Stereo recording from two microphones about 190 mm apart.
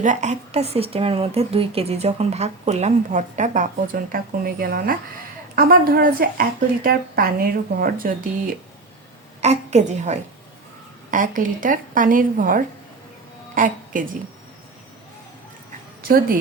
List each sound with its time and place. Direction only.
0.0 s a woman's voice: 40° right (ahead or behind)
9.4 s a woman's voice: 35° right (ahead or behind)
16.0 s a woman's voice: 50° right (ahead or behind)